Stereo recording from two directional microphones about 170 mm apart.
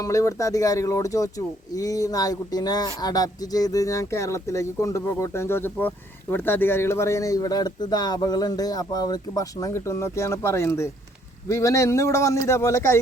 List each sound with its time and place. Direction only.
0.0 s speech: 20° left (ahead or behind)